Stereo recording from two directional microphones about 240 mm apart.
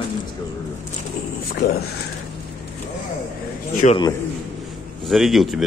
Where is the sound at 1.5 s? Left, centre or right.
Left.